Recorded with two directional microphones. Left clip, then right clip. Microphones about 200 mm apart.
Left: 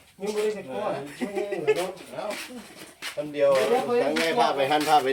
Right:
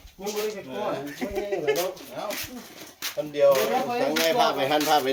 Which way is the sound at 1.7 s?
50° right (ahead or behind).